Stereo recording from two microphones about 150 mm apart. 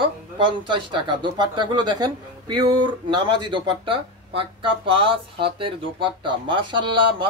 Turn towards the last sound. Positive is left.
turn(degrees=-35)  # may be behind; listen again after turning